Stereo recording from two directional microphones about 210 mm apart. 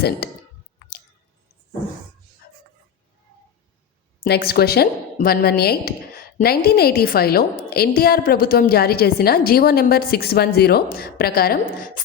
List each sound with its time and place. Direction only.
4.2 s a woman's voice: 45° left (ahead or behind)